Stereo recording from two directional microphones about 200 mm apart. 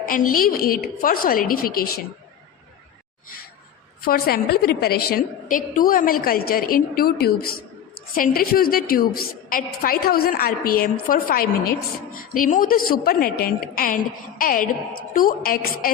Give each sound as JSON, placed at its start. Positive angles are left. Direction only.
{"t": 0.1, "sound": "a woman's voice", "side_deg": 45}
{"t": 4.0, "sound": "a woman's voice", "side_deg": 50}